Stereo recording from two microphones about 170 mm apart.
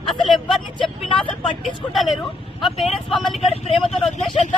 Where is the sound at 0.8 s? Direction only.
30° left (ahead or behind).